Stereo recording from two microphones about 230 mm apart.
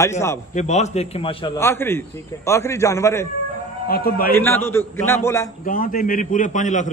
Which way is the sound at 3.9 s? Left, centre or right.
Left.